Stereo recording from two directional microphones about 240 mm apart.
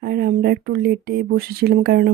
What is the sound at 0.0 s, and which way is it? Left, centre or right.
Speech, right.